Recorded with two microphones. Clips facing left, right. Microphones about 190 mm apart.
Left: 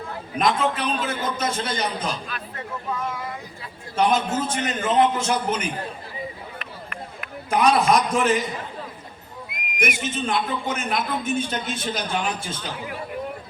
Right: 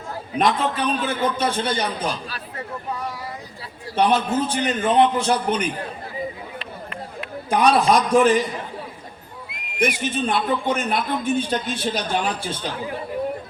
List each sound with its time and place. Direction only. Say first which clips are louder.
0.3 s speech: right 1 dB; 35° right (ahead or behind)
4.4 s speech: right 3 dB; 35° right (ahead or behind)
6.6 s a sound: right 3 dB; 30° right (ahead or behind)
9.5 s speech: right 4 dB; 30° right (ahead or behind)